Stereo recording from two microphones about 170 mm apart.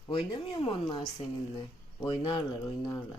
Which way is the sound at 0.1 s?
30° left (ahead or behind).